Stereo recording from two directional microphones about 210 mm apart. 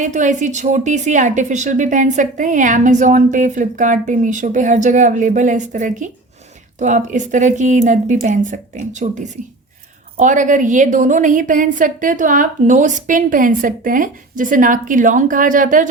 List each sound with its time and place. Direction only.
0.0 s a woman's voice: 35° right (ahead or behind)